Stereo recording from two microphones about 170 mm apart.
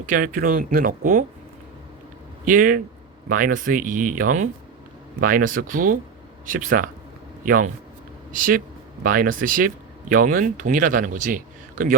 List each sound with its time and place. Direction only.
0.0 s speech: 55° right (ahead or behind)
2.4 s speech: 50° right (ahead or behind)